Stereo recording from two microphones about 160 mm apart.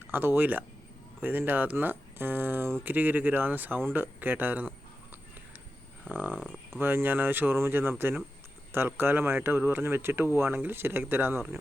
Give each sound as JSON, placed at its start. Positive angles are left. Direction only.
{"t": 0.1, "sound": "speech", "side_deg": -10}
{"t": 6.1, "sound": "speech", "side_deg": -10}